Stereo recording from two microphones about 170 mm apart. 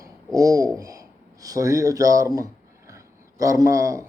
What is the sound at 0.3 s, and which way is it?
A man's voice, 20° right (ahead or behind).